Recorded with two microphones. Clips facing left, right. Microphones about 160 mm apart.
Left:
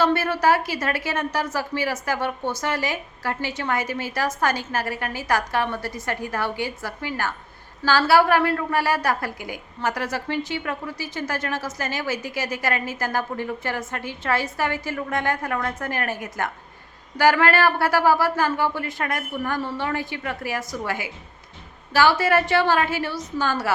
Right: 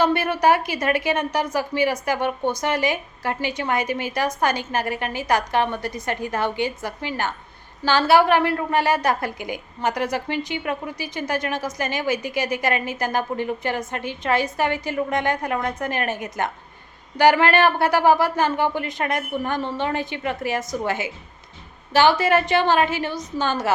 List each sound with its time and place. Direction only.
0.0 s a woman's voice: 15° right (ahead or behind)